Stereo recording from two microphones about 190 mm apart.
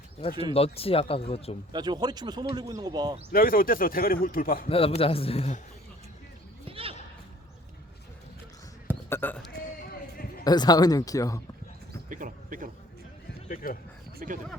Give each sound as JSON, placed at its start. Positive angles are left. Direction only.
{"t": 0.5, "sound": "speech", "side_deg": 30}
{"t": 1.7, "sound": "speech", "side_deg": -20}
{"t": 3.3, "sound": "a man's voice", "side_deg": 50}
{"t": 4.7, "sound": "speech", "side_deg": 30}
{"t": 6.7, "sound": "a sound", "side_deg": -30}
{"t": 9.0, "sound": "a sound", "side_deg": 10}
{"t": 10.4, "sound": "speech", "side_deg": 20}
{"t": 12.0, "sound": "speech", "side_deg": -45}
{"t": 13.5, "sound": "a man's voice", "side_deg": 50}
{"t": 14.2, "sound": "speech", "side_deg": -45}